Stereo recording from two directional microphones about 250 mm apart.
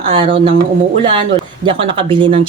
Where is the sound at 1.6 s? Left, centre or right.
Right.